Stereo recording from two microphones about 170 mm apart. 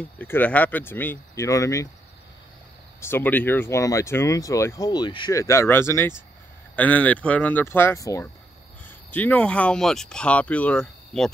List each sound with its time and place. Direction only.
0.2 s speech: 10° left (ahead or behind)
3.0 s speech: 15° left (ahead or behind)